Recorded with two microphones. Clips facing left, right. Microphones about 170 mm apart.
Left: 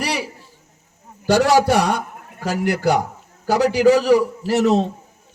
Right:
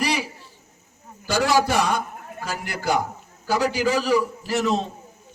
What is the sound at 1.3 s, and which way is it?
A man's voice, 70° left (ahead or behind).